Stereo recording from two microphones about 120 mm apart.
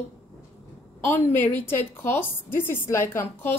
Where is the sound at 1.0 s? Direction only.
20° left (ahead or behind).